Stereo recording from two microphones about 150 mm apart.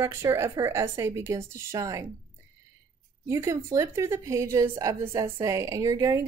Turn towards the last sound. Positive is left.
turn(degrees=-20)  # may be behind; listen again after turning